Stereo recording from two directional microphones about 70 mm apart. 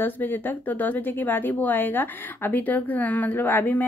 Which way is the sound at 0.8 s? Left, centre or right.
Left.